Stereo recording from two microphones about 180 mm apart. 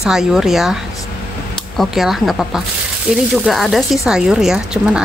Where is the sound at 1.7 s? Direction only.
Centre (ahead or behind).